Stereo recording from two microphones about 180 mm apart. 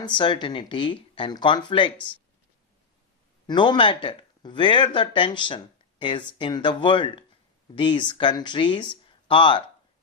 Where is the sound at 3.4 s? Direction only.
25° left (ahead or behind).